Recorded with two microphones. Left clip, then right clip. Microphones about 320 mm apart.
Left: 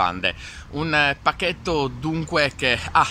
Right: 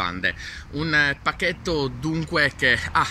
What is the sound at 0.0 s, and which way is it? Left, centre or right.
Speech, centre.